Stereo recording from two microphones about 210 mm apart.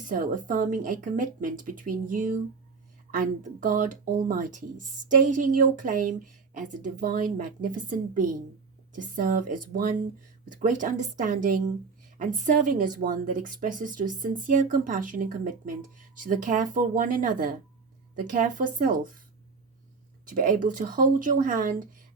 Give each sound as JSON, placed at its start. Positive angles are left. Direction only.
{"t": 0.1, "sound": "speech", "side_deg": -40}
{"t": 20.2, "sound": "speech", "side_deg": -40}